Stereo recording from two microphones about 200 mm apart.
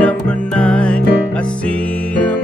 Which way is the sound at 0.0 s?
5° left (ahead or behind).